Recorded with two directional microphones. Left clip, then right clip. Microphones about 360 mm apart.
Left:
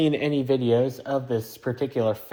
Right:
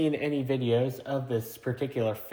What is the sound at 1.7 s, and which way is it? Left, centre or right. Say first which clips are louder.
Speech: left 5 dB; left.